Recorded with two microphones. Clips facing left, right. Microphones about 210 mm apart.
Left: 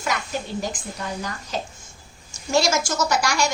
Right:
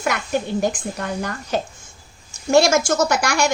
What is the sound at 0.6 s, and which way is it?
A woman's voice, 60° right (ahead or behind).